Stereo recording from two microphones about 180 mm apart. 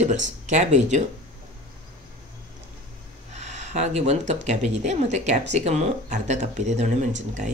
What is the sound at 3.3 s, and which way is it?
Speech, 40° right (ahead or behind).